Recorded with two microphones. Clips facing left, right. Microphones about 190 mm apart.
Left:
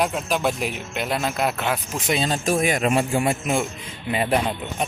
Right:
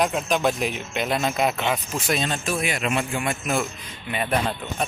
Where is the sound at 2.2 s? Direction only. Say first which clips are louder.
Left 4 dB; 40° left (ahead or behind).